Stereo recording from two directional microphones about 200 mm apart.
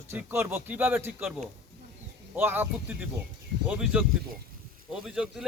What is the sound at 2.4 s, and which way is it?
Speech, 10° right (ahead or behind).